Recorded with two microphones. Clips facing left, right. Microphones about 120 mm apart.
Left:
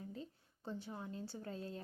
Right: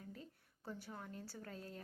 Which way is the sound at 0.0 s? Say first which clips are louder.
Left 5 dB; 25° left (ahead or behind).